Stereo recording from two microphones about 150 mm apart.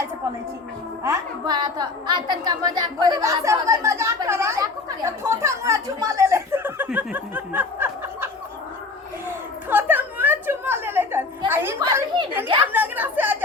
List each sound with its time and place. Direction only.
1.0 s a woman's voice: 25° right (ahead or behind)
9.6 s a sound: 10° right (ahead or behind)
11.8 s a woman's voice: 20° right (ahead or behind)